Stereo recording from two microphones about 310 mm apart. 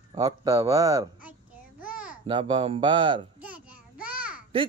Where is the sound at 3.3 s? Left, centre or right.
Centre.